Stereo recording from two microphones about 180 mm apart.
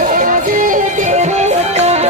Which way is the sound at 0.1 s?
50° right (ahead or behind).